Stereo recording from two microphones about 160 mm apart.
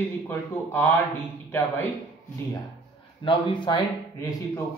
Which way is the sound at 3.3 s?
30° left (ahead or behind).